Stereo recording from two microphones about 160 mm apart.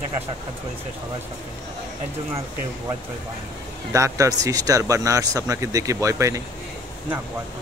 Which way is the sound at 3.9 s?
20° right (ahead or behind).